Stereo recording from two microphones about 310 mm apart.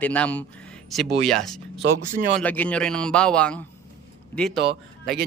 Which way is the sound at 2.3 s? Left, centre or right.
Centre.